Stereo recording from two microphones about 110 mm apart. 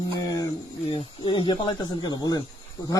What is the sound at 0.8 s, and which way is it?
Speech, 50° left (ahead or behind).